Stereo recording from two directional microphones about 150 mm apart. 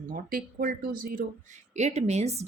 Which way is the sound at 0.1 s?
70° right (ahead or behind).